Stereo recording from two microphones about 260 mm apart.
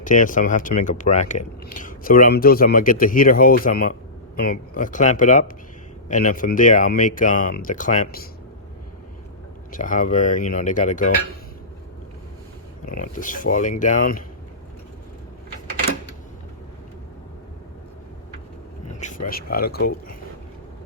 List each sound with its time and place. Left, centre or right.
0.0 s speech: left
9.7 s speech: left
13.0 s speech: left
18.9 s speech: left